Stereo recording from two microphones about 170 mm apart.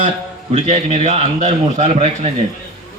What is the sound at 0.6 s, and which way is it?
A man's voice, 40° right (ahead or behind).